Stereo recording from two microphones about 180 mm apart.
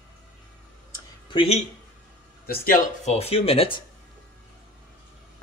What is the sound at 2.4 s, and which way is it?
Speech, 55° left (ahead or behind).